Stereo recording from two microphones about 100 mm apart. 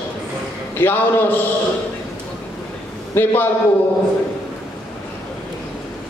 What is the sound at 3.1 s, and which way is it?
Speech, 20° left (ahead or behind).